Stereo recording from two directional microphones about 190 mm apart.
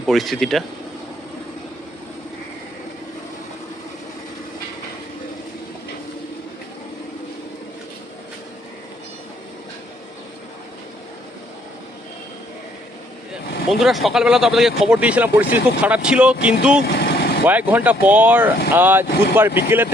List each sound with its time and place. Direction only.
0.0 s speech: centre (ahead or behind)
13.7 s speech: centre (ahead or behind)
17.0 s vehicle: 60° left (ahead or behind)
17.4 s speech: 10° right (ahead or behind)